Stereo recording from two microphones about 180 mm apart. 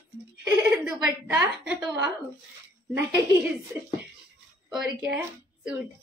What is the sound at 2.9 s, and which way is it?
Speech, 15° right (ahead or behind).